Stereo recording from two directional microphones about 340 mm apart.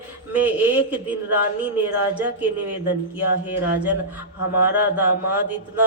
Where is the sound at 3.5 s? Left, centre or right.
Centre.